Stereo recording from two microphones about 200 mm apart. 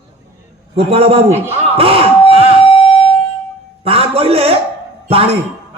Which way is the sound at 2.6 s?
30° left (ahead or behind).